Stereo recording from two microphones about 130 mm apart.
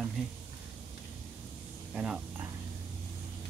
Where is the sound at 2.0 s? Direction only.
15° right (ahead or behind).